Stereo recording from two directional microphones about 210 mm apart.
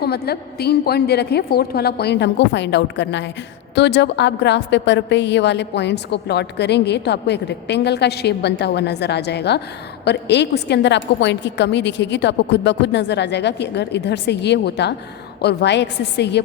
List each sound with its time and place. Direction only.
0.0 s a woman's voice: 50° left (ahead or behind)